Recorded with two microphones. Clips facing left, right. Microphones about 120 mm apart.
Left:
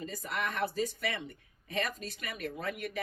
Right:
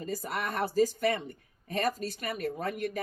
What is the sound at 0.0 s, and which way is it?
Speech, 40° right (ahead or behind).